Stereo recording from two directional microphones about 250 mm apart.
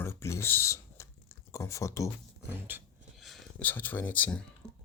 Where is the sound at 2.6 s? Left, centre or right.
Centre.